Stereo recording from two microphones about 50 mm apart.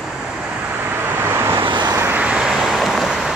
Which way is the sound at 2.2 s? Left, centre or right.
Right.